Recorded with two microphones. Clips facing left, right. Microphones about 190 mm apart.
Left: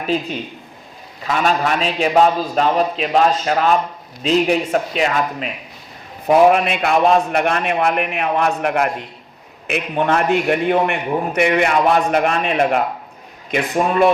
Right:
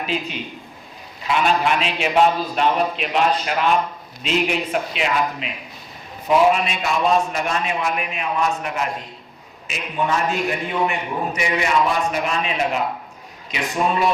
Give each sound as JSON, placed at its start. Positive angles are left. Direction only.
{"t": 0.0, "sound": "a man's voice", "side_deg": 45}
{"t": 6.2, "sound": "a man's voice", "side_deg": 55}